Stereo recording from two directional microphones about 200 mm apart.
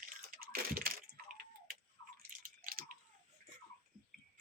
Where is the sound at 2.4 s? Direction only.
45° right (ahead or behind).